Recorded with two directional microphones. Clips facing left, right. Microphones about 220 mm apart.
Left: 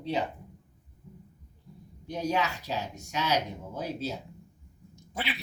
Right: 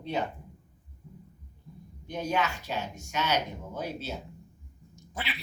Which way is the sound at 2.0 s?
35° left (ahead or behind).